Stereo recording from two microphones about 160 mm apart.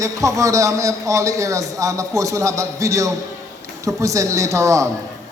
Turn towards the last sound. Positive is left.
turn(degrees=-20)  # may be behind; listen again after turning